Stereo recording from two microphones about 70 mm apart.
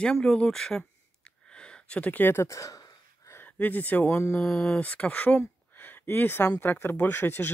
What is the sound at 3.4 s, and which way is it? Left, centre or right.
Speech, left.